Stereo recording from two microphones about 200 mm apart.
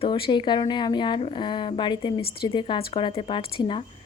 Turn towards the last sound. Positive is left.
turn(degrees=25)  # may be behind; listen again after turning